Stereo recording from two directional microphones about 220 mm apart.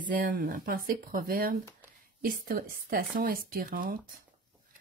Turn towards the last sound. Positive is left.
turn(degrees=-40)  # may be behind; listen again after turning